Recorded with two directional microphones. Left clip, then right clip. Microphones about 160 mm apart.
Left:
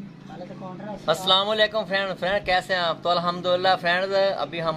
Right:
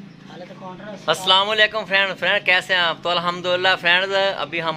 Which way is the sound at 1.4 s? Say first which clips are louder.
Right 4 dB; 15° right (ahead or behind).